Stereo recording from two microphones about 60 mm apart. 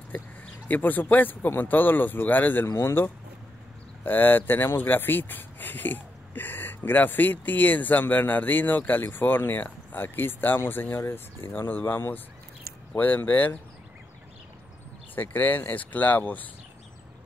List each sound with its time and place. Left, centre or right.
0.7 s speech: left
2.6 s speech: left
4.0 s speech: left
15.1 s speech: left